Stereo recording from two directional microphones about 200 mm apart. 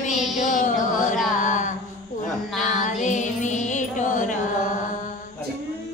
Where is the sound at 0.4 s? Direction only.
40° left (ahead or behind).